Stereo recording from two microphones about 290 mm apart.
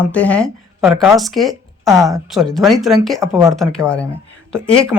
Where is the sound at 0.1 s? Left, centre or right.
Centre.